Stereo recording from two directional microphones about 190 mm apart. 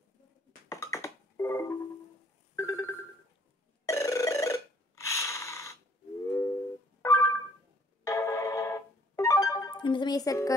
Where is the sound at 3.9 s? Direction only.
15° left (ahead or behind).